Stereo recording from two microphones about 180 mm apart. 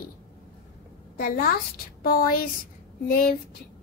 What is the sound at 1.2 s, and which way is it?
A woman's voice, 55° left (ahead or behind).